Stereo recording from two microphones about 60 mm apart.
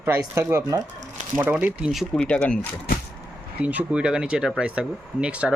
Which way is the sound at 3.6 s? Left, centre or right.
Right.